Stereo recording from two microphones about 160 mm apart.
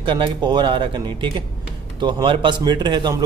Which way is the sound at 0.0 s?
30° right (ahead or behind).